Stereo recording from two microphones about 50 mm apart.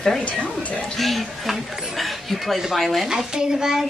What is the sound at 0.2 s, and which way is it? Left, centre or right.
Speech, left.